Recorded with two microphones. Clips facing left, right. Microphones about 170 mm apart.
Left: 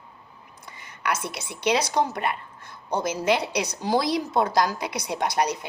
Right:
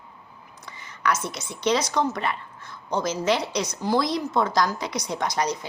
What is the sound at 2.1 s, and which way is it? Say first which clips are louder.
A woman's voice: even; 55° left (ahead or behind).